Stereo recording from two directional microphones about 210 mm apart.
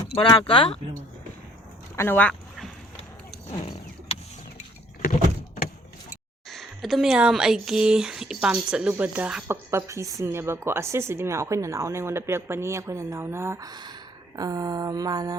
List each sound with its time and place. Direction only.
0.1 s speech: 25° left (ahead or behind)
2.0 s speech: 10° left (ahead or behind)
3.5 s a sound: 30° left (ahead or behind)
6.5 s speech: centre (ahead or behind); by 15.4 s 15° right (ahead or behind)